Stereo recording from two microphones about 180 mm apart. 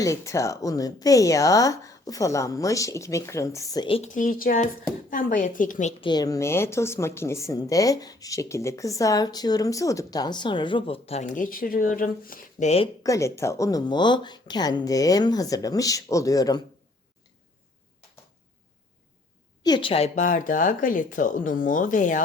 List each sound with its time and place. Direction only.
0.0 s speech: 15° left (ahead or behind)
4.1 s speech: 45° left (ahead or behind)
6.0 s speech: 25° left (ahead or behind)
13.0 s speech: 15° left (ahead or behind)
19.6 s speech: 25° left (ahead or behind); by 22.2 s 45° left (ahead or behind)